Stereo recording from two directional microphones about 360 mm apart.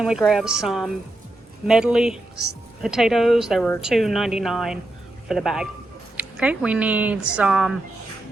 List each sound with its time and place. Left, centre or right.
0.0 s speech: centre